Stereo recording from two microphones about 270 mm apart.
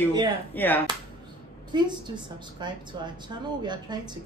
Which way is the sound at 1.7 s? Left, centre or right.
Centre.